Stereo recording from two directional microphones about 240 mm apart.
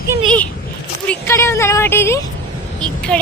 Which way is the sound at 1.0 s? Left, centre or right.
Centre.